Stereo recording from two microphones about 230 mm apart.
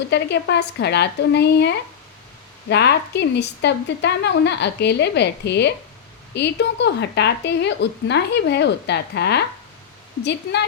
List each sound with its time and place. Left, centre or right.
0.1 s a woman's voice: left